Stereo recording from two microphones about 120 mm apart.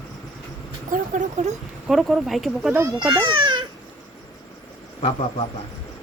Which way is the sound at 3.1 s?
45° right (ahead or behind).